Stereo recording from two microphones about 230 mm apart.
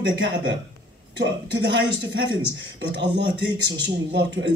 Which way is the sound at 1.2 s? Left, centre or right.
Right.